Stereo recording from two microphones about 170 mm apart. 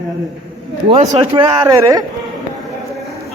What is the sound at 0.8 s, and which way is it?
Speech, 40° right (ahead or behind).